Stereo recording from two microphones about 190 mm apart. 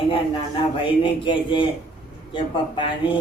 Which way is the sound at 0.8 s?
25° left (ahead or behind).